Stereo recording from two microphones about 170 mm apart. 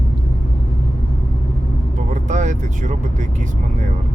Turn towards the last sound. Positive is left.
turn(degrees=-45)  # may be behind; listen again after turning